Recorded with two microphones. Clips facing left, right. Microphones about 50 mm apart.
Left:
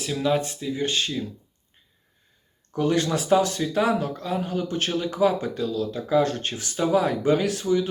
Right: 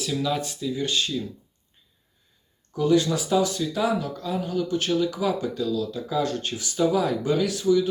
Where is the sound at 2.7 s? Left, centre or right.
Left.